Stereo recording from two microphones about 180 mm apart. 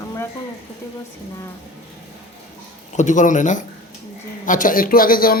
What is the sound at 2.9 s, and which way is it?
Speech, 40° left (ahead or behind).